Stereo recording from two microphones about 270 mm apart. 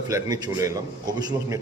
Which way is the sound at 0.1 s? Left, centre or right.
Centre.